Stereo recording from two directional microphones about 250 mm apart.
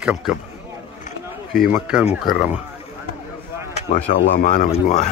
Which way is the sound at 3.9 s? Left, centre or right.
Left.